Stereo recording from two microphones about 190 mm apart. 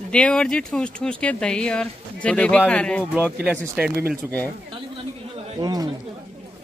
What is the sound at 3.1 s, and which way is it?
Speech, 5° right (ahead or behind).